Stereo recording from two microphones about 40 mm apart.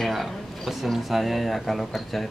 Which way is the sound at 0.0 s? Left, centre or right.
Centre.